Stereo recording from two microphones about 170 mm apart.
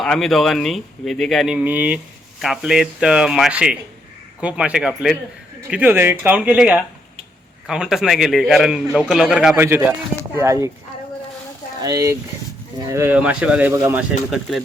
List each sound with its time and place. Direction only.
0.0 s speech: centre (ahead or behind)
9.6 s speech: 15° right (ahead or behind)
11.8 s speech: 20° right (ahead or behind)